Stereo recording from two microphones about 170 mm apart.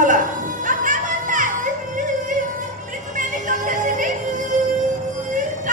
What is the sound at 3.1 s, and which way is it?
Music, 50° right (ahead or behind).